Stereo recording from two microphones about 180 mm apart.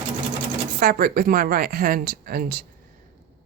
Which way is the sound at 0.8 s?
55° right (ahead or behind).